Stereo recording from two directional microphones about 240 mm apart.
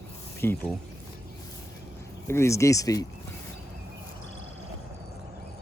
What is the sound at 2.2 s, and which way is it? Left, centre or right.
Speech, centre.